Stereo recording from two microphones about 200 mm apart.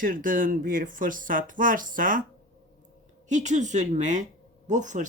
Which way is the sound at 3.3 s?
35° right (ahead or behind).